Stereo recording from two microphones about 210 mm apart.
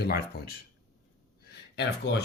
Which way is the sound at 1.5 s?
50° left (ahead or behind).